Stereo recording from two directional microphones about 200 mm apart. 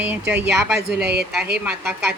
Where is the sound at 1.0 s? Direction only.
55° right (ahead or behind).